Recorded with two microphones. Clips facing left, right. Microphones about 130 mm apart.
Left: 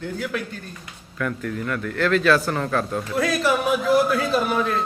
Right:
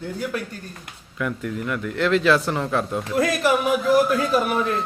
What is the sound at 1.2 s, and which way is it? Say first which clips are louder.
A man's voice: even; 15° right (ahead or behind).